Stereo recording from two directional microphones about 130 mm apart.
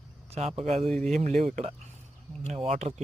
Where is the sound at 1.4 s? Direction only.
60° right (ahead or behind).